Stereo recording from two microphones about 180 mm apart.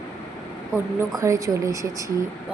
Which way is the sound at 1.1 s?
20° right (ahead or behind).